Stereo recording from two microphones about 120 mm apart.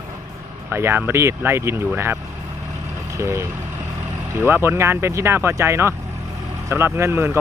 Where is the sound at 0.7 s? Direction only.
20° right (ahead or behind).